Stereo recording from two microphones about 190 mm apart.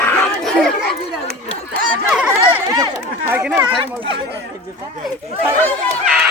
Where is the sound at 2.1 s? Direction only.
5° right (ahead or behind).